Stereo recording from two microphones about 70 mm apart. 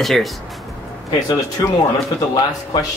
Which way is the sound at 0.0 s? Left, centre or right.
Centre.